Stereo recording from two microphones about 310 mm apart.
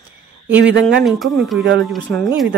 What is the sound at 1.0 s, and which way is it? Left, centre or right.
Speech, centre.